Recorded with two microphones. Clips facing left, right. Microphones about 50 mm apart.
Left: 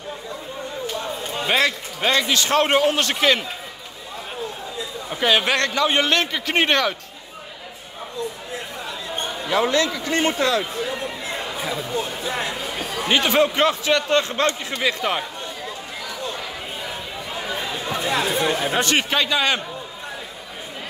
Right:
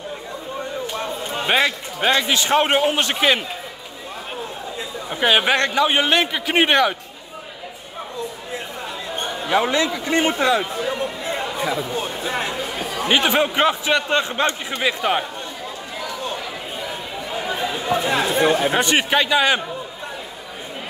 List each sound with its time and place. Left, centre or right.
1.5 s a man's voice: centre
5.1 s a man's voice: centre
9.5 s a man's voice: centre
11.6 s speech: centre
12.3 s a man's voice: right
17.5 s a sound: centre
18.0 s a sound: right
18.6 s a man's voice: centre